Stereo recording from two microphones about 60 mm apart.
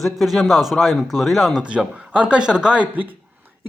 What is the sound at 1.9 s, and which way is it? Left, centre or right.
Speech, centre.